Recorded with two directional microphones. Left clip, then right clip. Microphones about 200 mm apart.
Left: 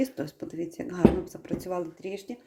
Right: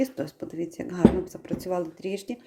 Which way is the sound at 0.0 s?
Centre (ahead or behind).